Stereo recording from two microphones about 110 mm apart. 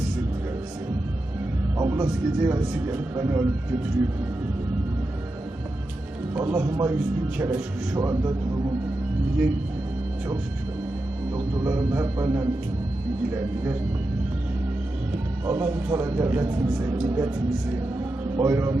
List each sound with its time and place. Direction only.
1.8 s speech: 30° right (ahead or behind)
6.3 s speech: 20° right (ahead or behind)
6.6 s a man's voice: 35° right (ahead or behind)
11.6 s speech: 25° right (ahead or behind)
15.4 s speech: 25° right (ahead or behind)
18.3 s speech: 25° right (ahead or behind)